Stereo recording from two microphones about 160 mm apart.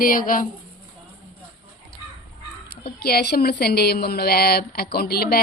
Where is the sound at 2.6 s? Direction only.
75° left (ahead or behind).